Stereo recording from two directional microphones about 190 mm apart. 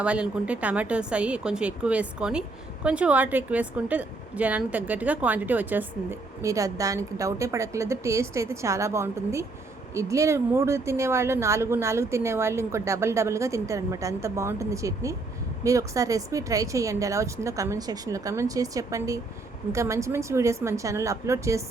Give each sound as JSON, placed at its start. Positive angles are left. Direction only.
{"t": 0.0, "sound": "a woman's voice", "side_deg": -5}